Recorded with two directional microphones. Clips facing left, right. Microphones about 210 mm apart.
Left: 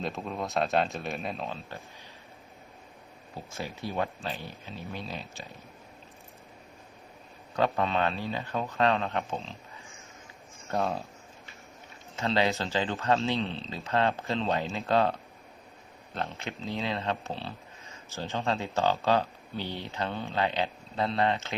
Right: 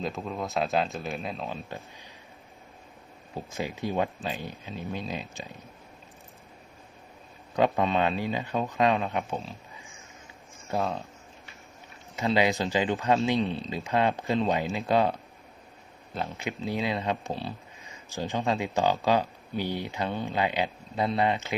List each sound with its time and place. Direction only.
0.0 s speech: centre (ahead or behind)
3.3 s speech: 15° right (ahead or behind)
7.5 s speech: 15° right (ahead or behind)
10.8 s speech: centre (ahead or behind)
12.1 s speech: 15° right (ahead or behind)
16.3 s speech: 15° right (ahead or behind)